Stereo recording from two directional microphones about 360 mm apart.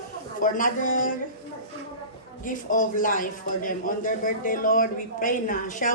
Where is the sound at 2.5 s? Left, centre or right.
Left.